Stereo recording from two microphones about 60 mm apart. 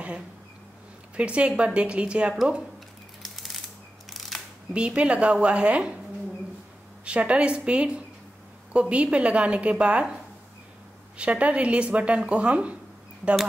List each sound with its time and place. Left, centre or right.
1.1 s a woman's voice: centre
3.2 s a sound: centre
4.3 s camera: centre
4.7 s speech: centre
7.1 s speech: centre
11.1 s speech: right